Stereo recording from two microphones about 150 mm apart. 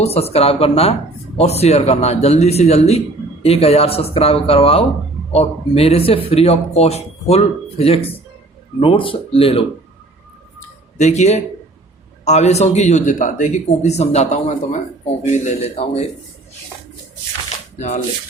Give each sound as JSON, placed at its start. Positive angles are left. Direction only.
{"t": 0.0, "sound": "speech", "side_deg": 45}
{"t": 10.9, "sound": "speech", "side_deg": 50}
{"t": 17.7, "sound": "speech", "side_deg": 50}